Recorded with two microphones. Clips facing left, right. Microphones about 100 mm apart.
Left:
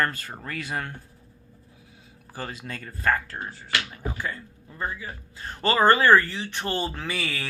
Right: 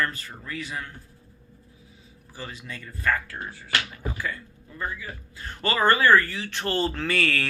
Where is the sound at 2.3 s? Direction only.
45° left (ahead or behind).